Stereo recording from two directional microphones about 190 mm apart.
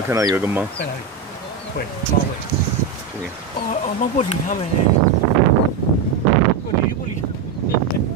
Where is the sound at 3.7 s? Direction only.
40° left (ahead or behind).